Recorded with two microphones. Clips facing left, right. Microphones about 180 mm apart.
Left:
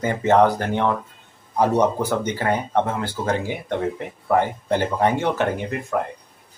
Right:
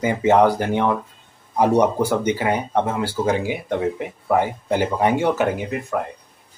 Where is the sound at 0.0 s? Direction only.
10° right (ahead or behind).